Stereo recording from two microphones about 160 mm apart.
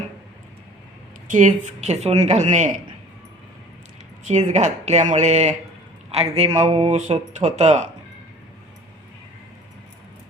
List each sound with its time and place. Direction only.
1.3 s speech: 50° right (ahead or behind)
4.3 s speech: 45° right (ahead or behind)